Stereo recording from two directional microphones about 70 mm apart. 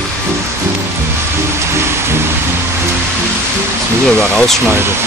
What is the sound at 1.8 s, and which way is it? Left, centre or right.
Music, right.